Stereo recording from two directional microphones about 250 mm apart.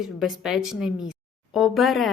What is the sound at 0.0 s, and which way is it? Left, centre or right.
A woman's voice, centre.